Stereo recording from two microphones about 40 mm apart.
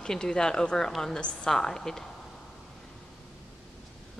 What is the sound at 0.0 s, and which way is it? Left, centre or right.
A woman's voice, centre.